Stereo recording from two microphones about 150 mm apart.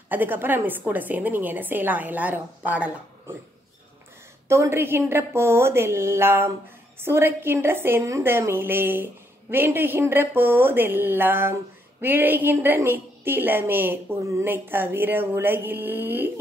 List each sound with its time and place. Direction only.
0.1 s a woman's voice: 15° right (ahead or behind)
4.5 s a woman's voice: 15° right (ahead or behind)